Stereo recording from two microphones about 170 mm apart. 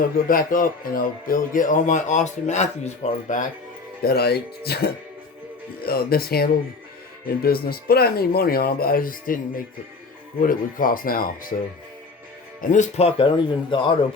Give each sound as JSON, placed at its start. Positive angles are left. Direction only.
{"t": 0.3, "sound": "speech", "side_deg": 55}
{"t": 4.0, "sound": "speech", "side_deg": 70}
{"t": 12.6, "sound": "speech", "side_deg": 45}